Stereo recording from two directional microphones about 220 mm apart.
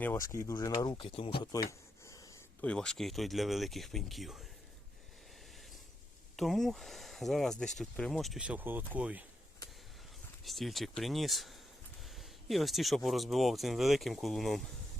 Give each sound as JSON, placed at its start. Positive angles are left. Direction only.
{"t": 0.0, "sound": "speech", "side_deg": 10}
{"t": 2.6, "sound": "speech", "side_deg": 5}
{"t": 6.3, "sound": "speech", "side_deg": 0}
{"t": 10.4, "sound": "speech", "side_deg": 0}